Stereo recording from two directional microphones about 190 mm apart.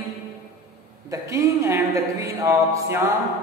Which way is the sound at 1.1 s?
15° right (ahead or behind).